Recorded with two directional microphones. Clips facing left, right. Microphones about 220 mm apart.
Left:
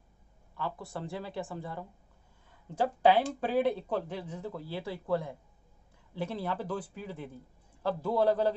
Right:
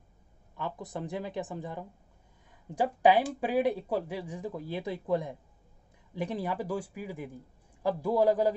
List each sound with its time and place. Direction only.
0.6 s speech: 20° right (ahead or behind)